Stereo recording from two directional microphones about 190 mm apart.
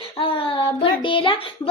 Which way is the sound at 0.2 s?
30° left (ahead or behind).